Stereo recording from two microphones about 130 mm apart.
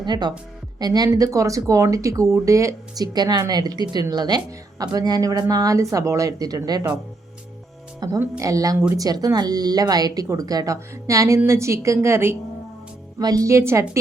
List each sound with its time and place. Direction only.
0.0 s speech: 35° right (ahead or behind)
8.2 s speech: 25° right (ahead or behind)